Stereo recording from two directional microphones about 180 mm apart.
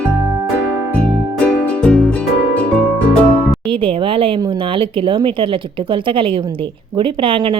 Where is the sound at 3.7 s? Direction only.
30° right (ahead or behind).